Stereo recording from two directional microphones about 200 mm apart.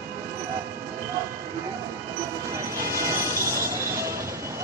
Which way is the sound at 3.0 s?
15° right (ahead or behind).